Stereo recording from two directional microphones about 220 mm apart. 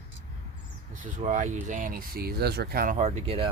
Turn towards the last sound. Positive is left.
turn(degrees=-30)  # may be behind; listen again after turning